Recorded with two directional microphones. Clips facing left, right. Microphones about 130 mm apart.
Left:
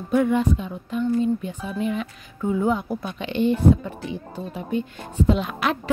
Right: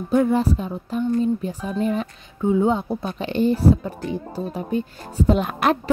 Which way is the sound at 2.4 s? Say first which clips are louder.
Right 3 dB; 25° right (ahead or behind).